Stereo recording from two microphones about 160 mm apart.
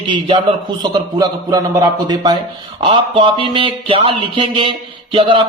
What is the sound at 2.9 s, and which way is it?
A man's voice, 30° right (ahead or behind).